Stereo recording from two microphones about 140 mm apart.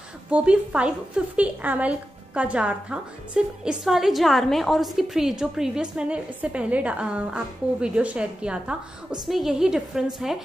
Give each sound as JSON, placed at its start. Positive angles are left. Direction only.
{"t": 0.3, "sound": "a woman's voice", "side_deg": -10}